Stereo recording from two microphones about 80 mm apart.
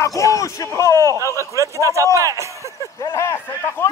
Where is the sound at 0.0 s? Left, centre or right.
Left.